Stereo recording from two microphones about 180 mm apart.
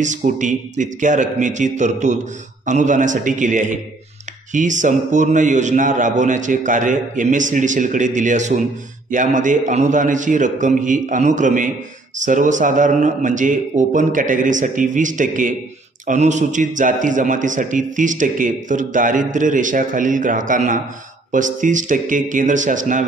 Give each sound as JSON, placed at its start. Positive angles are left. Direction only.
{"t": 0.0, "sound": "a man's voice", "side_deg": -45}